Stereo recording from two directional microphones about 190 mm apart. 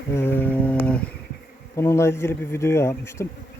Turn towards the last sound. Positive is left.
turn(degrees=15)  # may be behind; listen again after turning